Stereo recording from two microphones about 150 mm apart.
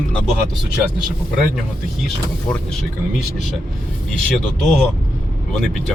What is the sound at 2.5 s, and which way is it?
Speech, 5° left (ahead or behind).